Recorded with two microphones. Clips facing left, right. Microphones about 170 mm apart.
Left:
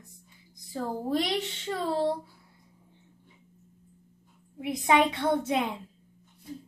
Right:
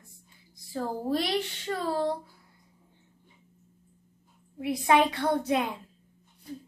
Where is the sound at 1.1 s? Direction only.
20° left (ahead or behind).